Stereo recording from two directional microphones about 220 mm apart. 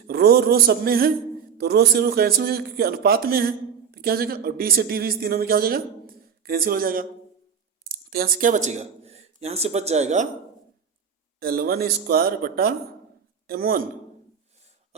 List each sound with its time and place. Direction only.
0.1 s speech: 45° right (ahead or behind)
11.3 s speech: 45° right (ahead or behind)